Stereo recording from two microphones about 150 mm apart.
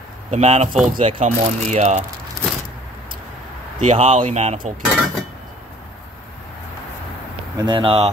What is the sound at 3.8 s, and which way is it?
Speech, 50° right (ahead or behind).